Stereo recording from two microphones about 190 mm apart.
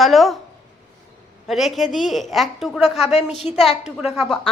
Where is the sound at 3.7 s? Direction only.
35° left (ahead or behind).